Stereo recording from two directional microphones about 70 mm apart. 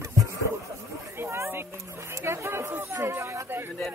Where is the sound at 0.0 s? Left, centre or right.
Right.